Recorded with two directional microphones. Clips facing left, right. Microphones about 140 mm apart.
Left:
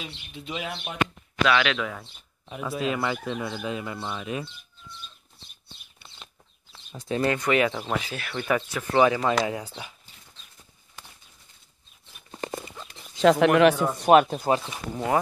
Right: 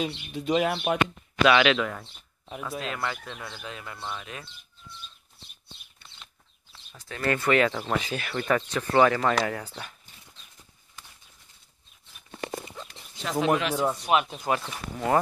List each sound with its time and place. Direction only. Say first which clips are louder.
0.0 s speech: right 9 dB; 45° right (ahead or behind)
1.4 s speech: right 3 dB; 10° right (ahead or behind)
1.9 s speech: even; centre (ahead or behind)
6.0 s a sound: left 2 dB; 10° left (ahead or behind)
7.0 s speech: left 3 dB; 20° left (ahead or behind)
13.2 s speech: left 8 dB; 75° left (ahead or behind)
13.9 s speech: left 8 dB; 45° left (ahead or behind)
14.6 s speech: left 1 dB; 10° left (ahead or behind)